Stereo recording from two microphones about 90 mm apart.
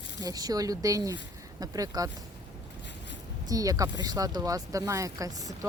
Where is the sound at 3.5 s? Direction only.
40° right (ahead or behind).